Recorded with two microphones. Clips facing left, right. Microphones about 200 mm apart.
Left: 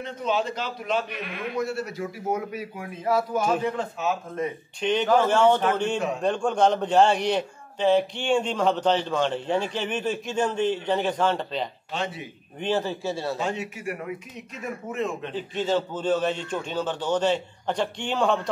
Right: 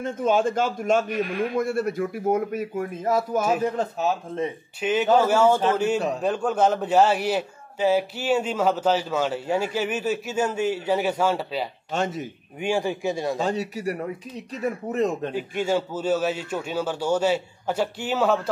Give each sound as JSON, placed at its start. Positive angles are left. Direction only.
{"t": 0.0, "sound": "a man's voice", "side_deg": -50}
{"t": 3.3, "sound": "a man's voice", "side_deg": -5}
{"t": 3.6, "sound": "speech", "side_deg": -40}
{"t": 4.8, "sound": "a man's voice", "side_deg": -5}
{"t": 11.9, "sound": "a man's voice", "side_deg": -45}
{"t": 12.5, "sound": "a man's voice", "side_deg": -10}
{"t": 13.4, "sound": "speech", "side_deg": -35}
{"t": 15.3, "sound": "a man's voice", "side_deg": -10}